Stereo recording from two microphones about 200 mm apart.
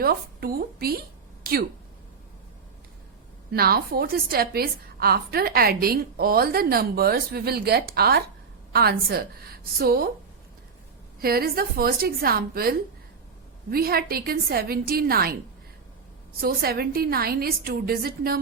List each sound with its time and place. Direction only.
0.0 s a woman's voice: 50° right (ahead or behind)
3.5 s a woman's voice: 50° right (ahead or behind)
11.2 s a woman's voice: 50° right (ahead or behind)
16.4 s a woman's voice: 50° right (ahead or behind)